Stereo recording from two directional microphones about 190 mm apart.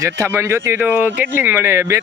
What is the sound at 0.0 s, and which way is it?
Speech, 15° right (ahead or behind).